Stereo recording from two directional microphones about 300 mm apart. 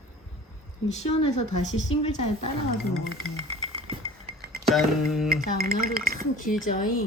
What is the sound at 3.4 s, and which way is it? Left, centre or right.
Music, centre.